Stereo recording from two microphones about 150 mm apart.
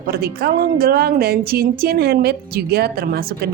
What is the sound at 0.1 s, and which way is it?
A woman's voice, 90° right.